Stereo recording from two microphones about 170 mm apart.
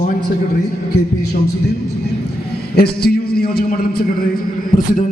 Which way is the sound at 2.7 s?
65° left (ahead or behind).